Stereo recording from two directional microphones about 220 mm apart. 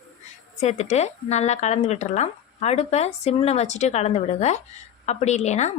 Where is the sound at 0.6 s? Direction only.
30° left (ahead or behind).